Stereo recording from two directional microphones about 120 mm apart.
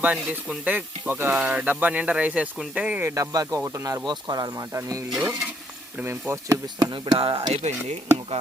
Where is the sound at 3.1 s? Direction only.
30° right (ahead or behind).